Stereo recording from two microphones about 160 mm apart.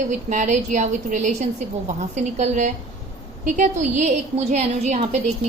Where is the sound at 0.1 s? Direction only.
50° right (ahead or behind).